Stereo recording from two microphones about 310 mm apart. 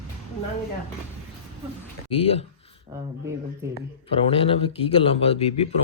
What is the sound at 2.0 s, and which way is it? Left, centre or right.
Speech, centre.